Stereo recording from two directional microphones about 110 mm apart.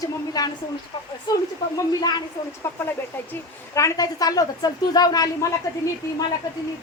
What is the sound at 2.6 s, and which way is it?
A woman's voice, 25° left (ahead or behind).